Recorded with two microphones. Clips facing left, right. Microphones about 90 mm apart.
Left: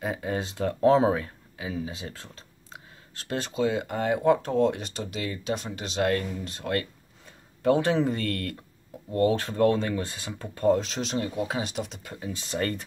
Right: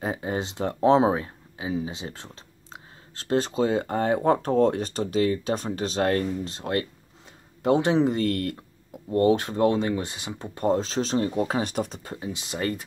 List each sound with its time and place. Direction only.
0.0 s speech: 25° right (ahead or behind)
12.3 s speech: 10° right (ahead or behind)